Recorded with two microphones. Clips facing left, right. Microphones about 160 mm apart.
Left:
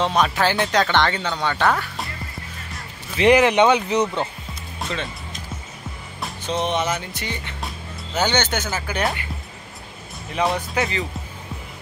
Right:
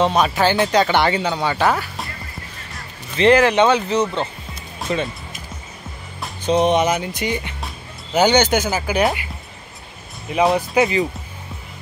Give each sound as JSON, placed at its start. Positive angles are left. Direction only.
{"t": 0.0, "sound": "speech", "side_deg": -5}
{"t": 3.2, "sound": "speech", "side_deg": 15}
{"t": 4.8, "sound": "music", "side_deg": 0}
{"t": 6.4, "sound": "speech", "side_deg": -15}
{"t": 10.7, "sound": "speech", "side_deg": -15}